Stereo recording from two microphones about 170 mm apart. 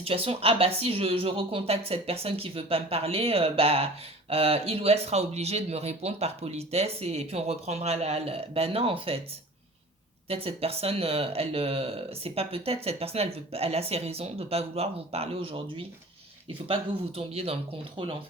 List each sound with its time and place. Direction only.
0.0 s speech: 35° right (ahead or behind)
10.2 s speech: 35° right (ahead or behind)